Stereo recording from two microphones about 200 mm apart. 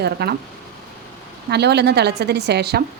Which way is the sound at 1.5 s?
55° right (ahead or behind).